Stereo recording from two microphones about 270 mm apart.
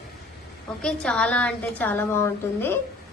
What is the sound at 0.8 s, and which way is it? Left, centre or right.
A woman's voice, centre.